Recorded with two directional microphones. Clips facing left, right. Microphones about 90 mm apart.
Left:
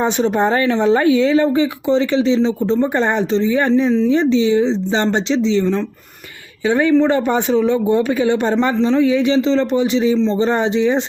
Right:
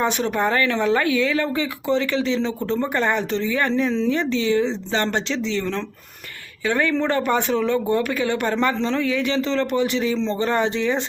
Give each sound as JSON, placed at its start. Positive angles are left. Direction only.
{"t": 0.0, "sound": "a woman's voice", "side_deg": 25}